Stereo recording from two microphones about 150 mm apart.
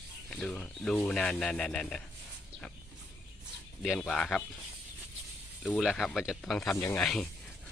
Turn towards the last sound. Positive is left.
turn(degrees=5)  # may be behind; listen again after turning